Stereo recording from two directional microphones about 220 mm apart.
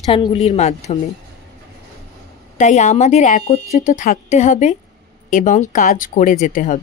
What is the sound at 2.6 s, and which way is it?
Speech, 30° left (ahead or behind).